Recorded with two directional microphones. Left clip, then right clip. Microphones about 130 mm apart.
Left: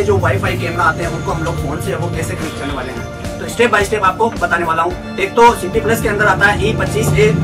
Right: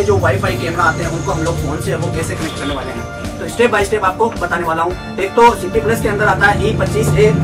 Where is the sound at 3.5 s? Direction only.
Centre (ahead or behind).